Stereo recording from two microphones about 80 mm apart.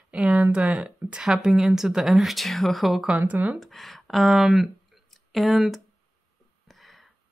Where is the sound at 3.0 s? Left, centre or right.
Centre.